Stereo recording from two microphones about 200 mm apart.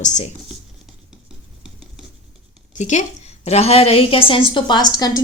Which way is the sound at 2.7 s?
35° left (ahead or behind).